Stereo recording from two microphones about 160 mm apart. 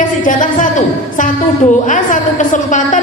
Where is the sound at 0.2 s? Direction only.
55° left (ahead or behind).